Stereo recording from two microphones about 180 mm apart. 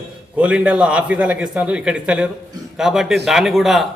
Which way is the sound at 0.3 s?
5° right (ahead or behind).